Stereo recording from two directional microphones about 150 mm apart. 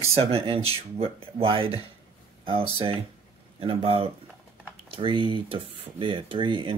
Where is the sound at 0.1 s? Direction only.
40° right (ahead or behind).